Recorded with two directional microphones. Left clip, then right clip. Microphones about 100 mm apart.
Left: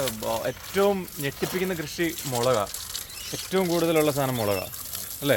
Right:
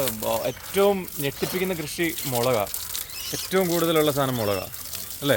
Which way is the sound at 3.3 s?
30° right (ahead or behind).